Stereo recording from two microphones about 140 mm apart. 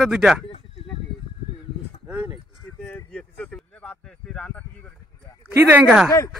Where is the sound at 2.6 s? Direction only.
10° left (ahead or behind).